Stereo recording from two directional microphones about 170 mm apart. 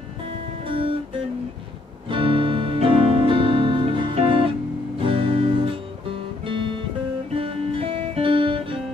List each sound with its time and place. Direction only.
0.7 s music: 30° right (ahead or behind)
2.0 s music: 30° right (ahead or behind)
7.3 s guitar: 35° right (ahead or behind)